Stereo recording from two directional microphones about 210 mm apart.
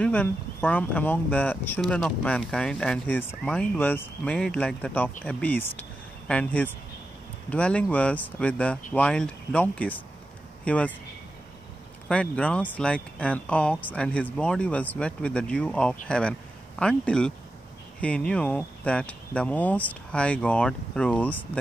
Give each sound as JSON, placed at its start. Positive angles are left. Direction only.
{"t": 0.0, "sound": "speech", "side_deg": 5}
{"t": 12.1, "sound": "speech", "side_deg": 5}